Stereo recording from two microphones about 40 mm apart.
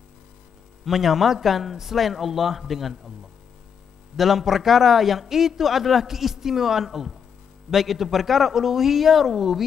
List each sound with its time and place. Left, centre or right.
0.8 s speech: centre
4.2 s a man's voice: centre